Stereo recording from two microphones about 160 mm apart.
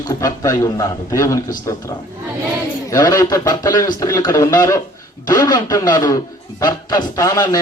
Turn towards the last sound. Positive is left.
turn(degrees=20)  # may be behind; listen again after turning